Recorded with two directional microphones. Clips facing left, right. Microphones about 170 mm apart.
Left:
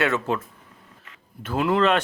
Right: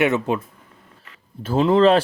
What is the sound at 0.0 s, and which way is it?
Speech, 20° right (ahead or behind).